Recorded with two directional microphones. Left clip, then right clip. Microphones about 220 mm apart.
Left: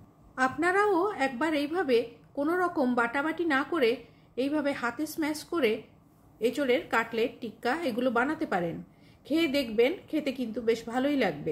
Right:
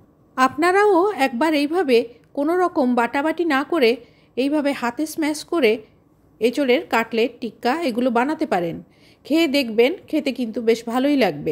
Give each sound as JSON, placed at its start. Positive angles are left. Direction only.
{"t": 0.3, "sound": "a woman's voice", "side_deg": -40}